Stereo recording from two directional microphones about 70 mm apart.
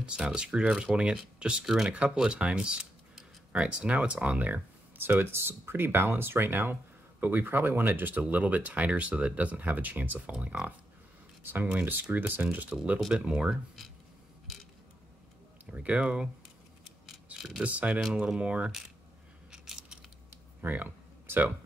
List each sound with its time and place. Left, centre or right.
0.0 s speech: centre
11.4 s speech: right
13.1 s speech: centre
15.7 s speech: centre
17.4 s a sound: centre
17.6 s speech: centre
18.0 s speech: centre
19.5 s coin: centre
20.6 s a sound: right